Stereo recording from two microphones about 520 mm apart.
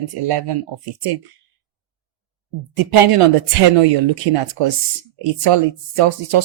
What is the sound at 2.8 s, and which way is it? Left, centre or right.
Speech, right.